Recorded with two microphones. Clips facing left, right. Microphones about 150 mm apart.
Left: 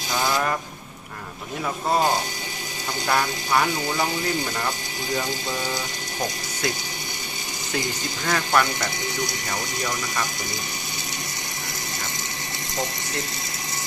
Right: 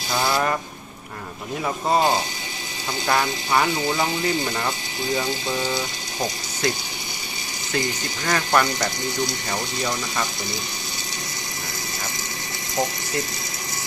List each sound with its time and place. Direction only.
0.1 s vehicle: 10° right (ahead or behind)
3.1 s speech: 5° right (ahead or behind)
8.3 s speech: centre (ahead or behind)